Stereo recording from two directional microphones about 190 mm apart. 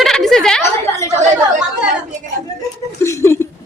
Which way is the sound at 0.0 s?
Centre (ahead or behind).